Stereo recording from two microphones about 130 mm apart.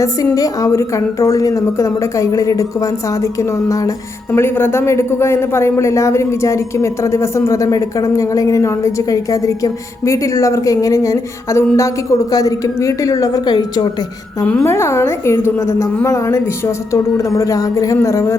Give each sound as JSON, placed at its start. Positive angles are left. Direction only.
{"t": 0.3, "sound": "a man's voice", "side_deg": 25}
{"t": 14.6, "sound": "a man's voice", "side_deg": 20}